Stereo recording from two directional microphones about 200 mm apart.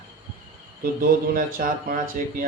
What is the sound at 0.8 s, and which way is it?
Speech, 45° right (ahead or behind).